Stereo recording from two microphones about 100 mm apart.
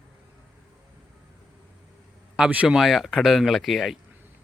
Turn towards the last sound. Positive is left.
turn(degrees=0)  # may be behind; listen again after turning